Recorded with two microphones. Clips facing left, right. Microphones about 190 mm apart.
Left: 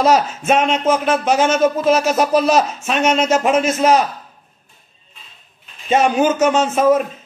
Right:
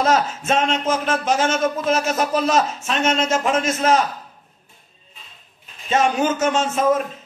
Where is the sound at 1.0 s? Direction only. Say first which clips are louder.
Left 4 dB; 15° left (ahead or behind).